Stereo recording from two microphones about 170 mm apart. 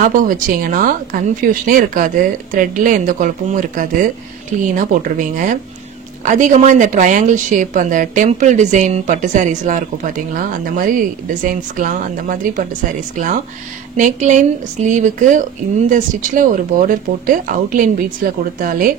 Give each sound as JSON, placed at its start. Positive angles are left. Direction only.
{"t": 0.0, "sound": "a woman's voice", "side_deg": -55}
{"t": 13.9, "sound": "a woman's voice", "side_deg": -45}